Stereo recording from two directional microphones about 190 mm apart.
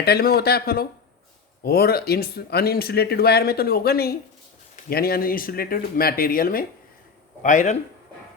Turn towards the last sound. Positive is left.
turn(degrees=40)  # may be behind; listen again after turning